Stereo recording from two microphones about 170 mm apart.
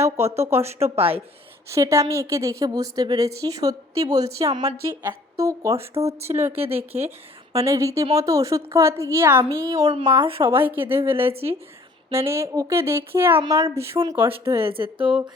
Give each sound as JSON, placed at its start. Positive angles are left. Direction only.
{"t": 0.0, "sound": "a woman's voice", "side_deg": -15}
{"t": 0.9, "sound": "speech", "side_deg": -35}
{"t": 1.7, "sound": "a woman's voice", "side_deg": -15}
{"t": 6.6, "sound": "speech", "side_deg": -35}
{"t": 7.6, "sound": "a woman's voice", "side_deg": -20}
{"t": 10.2, "sound": "speech", "side_deg": -30}
{"t": 10.5, "sound": "a woman's voice", "side_deg": -10}
{"t": 14.7, "sound": "speech", "side_deg": -30}